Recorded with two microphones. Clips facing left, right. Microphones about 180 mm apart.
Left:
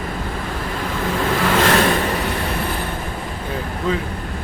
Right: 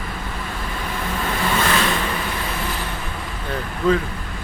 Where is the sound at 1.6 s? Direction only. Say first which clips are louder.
Left 6 dB; 70° left (ahead or behind); by 2.8 s 55° left (ahead or behind).